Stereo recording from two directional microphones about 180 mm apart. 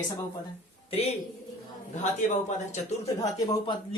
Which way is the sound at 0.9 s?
35° left (ahead or behind).